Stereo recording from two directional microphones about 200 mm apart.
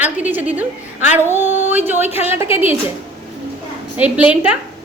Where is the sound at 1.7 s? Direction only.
10° right (ahead or behind).